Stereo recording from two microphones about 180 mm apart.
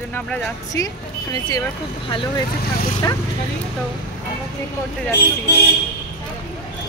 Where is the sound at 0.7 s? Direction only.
20° left (ahead or behind).